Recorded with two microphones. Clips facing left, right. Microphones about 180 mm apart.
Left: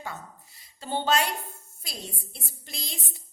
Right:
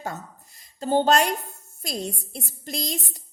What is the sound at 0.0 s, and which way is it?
A woman's voice, 45° right (ahead or behind).